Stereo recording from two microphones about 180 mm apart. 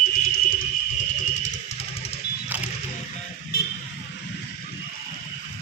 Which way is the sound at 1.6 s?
35° left (ahead or behind).